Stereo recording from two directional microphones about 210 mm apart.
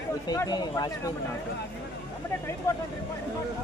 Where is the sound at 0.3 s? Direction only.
20° left (ahead or behind).